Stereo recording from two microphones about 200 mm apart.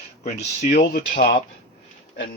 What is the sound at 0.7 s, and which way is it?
Speech, 55° left (ahead or behind).